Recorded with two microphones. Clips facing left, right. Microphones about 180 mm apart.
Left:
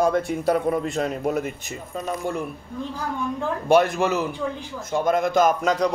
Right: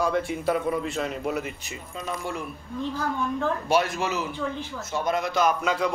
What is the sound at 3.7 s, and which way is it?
Speech, 55° left (ahead or behind).